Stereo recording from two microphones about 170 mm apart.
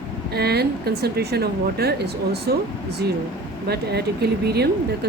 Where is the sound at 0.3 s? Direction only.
70° right (ahead or behind).